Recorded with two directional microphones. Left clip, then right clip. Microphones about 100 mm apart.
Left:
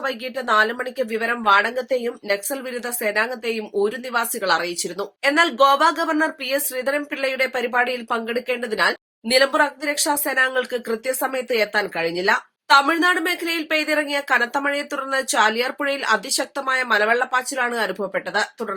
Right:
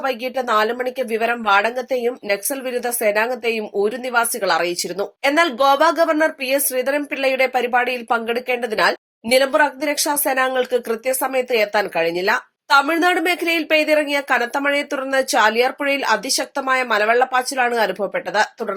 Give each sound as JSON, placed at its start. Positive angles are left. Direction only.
{"t": 0.0, "sound": "a woman's voice", "side_deg": -30}
{"t": 12.8, "sound": "speech", "side_deg": -25}